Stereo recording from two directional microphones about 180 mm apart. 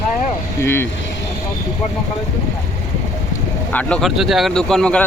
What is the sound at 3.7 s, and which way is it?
Speech, 5° left (ahead or behind).